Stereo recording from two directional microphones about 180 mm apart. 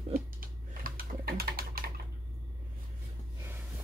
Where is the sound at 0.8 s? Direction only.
55° right (ahead or behind).